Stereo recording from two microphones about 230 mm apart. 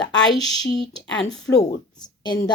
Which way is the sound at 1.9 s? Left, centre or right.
Centre.